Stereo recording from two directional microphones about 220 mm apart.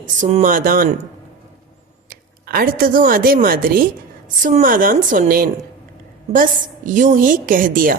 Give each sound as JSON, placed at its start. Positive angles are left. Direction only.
{"t": 0.0, "sound": "a woman's voice", "side_deg": -35}
{"t": 2.0, "sound": "a woman's voice", "side_deg": -40}